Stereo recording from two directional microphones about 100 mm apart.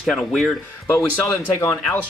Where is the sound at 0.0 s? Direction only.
Centre (ahead or behind).